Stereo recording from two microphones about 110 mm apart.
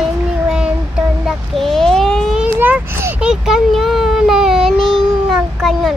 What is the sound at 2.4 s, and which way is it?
A child's voice, 15° right (ahead or behind).